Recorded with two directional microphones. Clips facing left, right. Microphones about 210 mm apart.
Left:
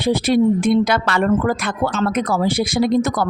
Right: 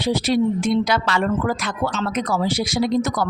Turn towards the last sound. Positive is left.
turn(degrees=55)  # may be behind; listen again after turning